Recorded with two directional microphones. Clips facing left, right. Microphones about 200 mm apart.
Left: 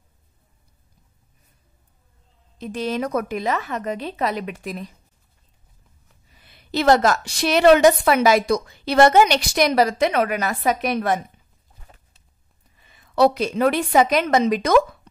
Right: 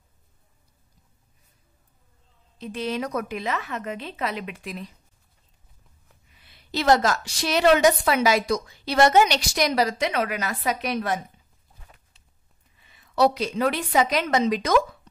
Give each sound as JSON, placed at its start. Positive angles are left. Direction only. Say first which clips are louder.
{"t": 2.6, "sound": "a woman's voice", "louder": "left 3 dB", "side_deg": 45}
{"t": 6.3, "sound": "a woman's voice", "louder": "left 5 dB", "side_deg": 50}
{"t": 12.8, "sound": "a woman's voice", "louder": "left 3 dB", "side_deg": 50}